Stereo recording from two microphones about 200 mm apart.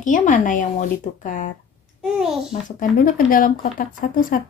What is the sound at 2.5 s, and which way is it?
Speech, 40° left (ahead or behind).